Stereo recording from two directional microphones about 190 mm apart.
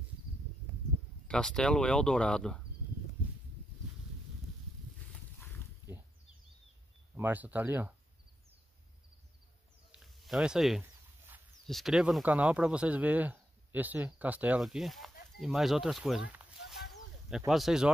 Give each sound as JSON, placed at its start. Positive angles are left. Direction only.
{"t": 1.2, "sound": "speech", "side_deg": 5}
{"t": 7.2, "sound": "speech", "side_deg": -10}
{"t": 9.8, "sound": "a sound", "side_deg": 0}
{"t": 11.6, "sound": "speech", "side_deg": 0}
{"t": 16.3, "sound": "a sound", "side_deg": -5}
{"t": 17.5, "sound": "speech", "side_deg": 0}